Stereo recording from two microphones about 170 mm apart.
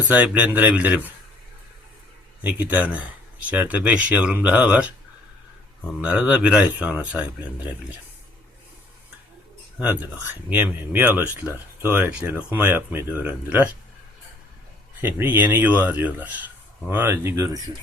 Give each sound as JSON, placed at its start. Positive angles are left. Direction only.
{"t": 0.0, "sound": "speech", "side_deg": -10}
{"t": 2.4, "sound": "speech", "side_deg": -10}
{"t": 6.0, "sound": "speech", "side_deg": -10}
{"t": 9.7, "sound": "speech", "side_deg": -10}
{"t": 15.0, "sound": "speech", "side_deg": -10}